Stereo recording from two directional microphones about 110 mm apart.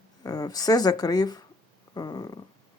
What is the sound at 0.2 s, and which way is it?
Speech, 35° left (ahead or behind).